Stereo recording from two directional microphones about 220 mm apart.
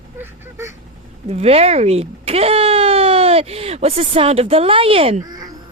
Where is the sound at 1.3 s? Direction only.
30° right (ahead or behind).